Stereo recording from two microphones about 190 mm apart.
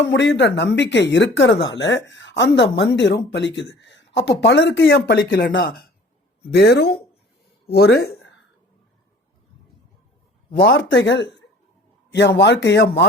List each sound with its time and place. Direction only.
0.0 s speech: 70° left (ahead or behind)
10.6 s speech: 50° left (ahead or behind)
11.0 s speech: 70° left (ahead or behind)